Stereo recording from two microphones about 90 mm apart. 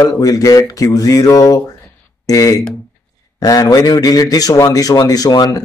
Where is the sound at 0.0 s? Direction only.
40° left (ahead or behind).